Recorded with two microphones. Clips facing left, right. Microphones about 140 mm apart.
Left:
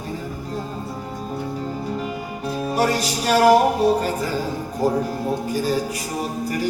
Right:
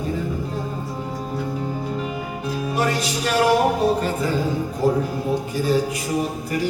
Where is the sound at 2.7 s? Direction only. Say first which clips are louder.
Left 2 dB; 40° left (ahead or behind).